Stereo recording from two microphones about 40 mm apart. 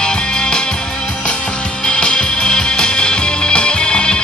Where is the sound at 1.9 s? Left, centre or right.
Left.